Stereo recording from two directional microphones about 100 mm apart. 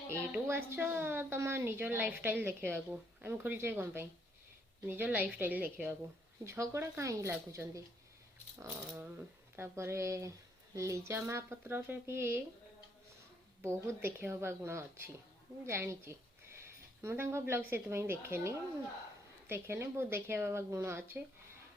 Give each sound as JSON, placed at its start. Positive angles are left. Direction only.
{"t": 0.4, "sound": "a woman's voice", "side_deg": -25}
{"t": 13.6, "sound": "a woman's voice", "side_deg": -25}